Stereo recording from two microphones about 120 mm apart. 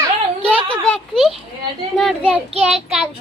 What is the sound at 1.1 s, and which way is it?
A child's voice, centre (ahead or behind).